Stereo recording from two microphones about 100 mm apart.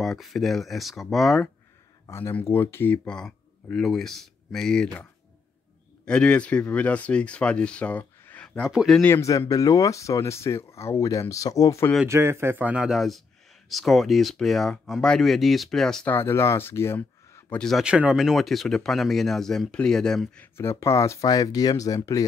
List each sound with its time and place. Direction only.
0.0 s speech: centre (ahead or behind)
2.0 s speech: 25° left (ahead or behind)
3.1 s speech: 10° left (ahead or behind)
6.0 s speech: 10° left (ahead or behind)
8.7 s speech: centre (ahead or behind)
9.0 s speech: 25° left (ahead or behind)
9.5 s speech: 35° left (ahead or behind)
12.1 s speech: 25° right (ahead or behind); by 16.1 s 5° left (ahead or behind)
16.1 s speech: 25° left (ahead or behind)
17.6 s speech: 5° left (ahead or behind)
17.8 s speech: 10° right (ahead or behind)
20.3 s speech: 25° left (ahead or behind)